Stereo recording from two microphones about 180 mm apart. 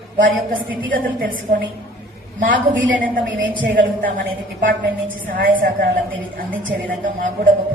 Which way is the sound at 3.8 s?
50° right (ahead or behind).